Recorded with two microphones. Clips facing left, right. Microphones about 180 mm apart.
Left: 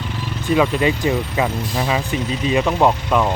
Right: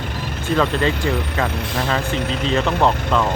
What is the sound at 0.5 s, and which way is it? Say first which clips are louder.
Speech: left 2 dB; 10° left (ahead or behind).